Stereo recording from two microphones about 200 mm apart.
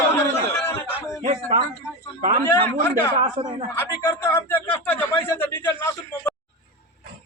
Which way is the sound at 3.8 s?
10° left (ahead or behind).